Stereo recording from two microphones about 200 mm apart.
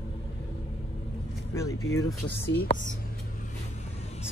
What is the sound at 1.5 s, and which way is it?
Speech, 15° left (ahead or behind).